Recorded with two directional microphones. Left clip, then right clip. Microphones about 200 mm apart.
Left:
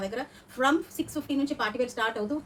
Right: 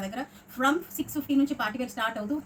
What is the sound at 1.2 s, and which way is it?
Speech, 15° left (ahead or behind).